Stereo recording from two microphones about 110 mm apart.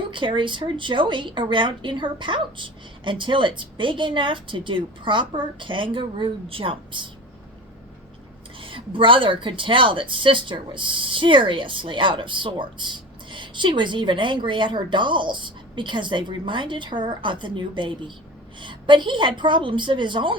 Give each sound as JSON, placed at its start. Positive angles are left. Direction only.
{"t": 0.1, "sound": "a woman's voice", "side_deg": -50}
{"t": 8.5, "sound": "a woman's voice", "side_deg": -50}